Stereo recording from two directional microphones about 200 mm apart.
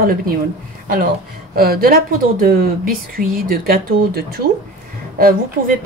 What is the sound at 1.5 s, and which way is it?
Speech, 50° right (ahead or behind).